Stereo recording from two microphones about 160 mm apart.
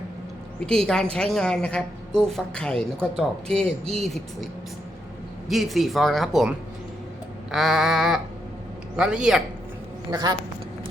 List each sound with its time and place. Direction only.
0.6 s a woman's voice: 5° left (ahead or behind)
5.5 s a woman's voice: centre (ahead or behind)
7.5 s a woman's voice: centre (ahead or behind)
10.1 s a woman's voice: 25° right (ahead or behind)